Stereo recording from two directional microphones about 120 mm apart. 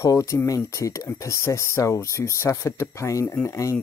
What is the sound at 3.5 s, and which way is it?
Speech, 25° left (ahead or behind).